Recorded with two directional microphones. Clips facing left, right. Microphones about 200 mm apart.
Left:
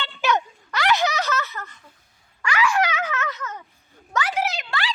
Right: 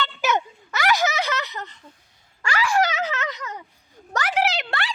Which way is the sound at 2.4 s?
30° right (ahead or behind).